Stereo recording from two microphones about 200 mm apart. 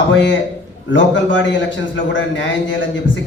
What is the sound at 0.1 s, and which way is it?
Speech, 65° left (ahead or behind).